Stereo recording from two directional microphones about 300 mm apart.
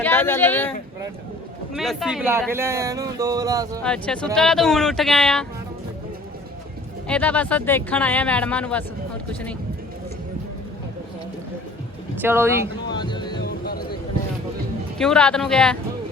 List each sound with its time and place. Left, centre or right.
0.0 s a sound: centre
1.7 s speech: centre
3.8 s speech: centre
7.1 s speech: centre
12.2 s speech: centre
12.9 s music: centre
13.4 s a sound: left
14.9 s speech: centre